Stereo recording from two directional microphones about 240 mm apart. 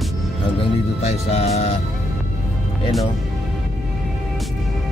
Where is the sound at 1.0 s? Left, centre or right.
Left.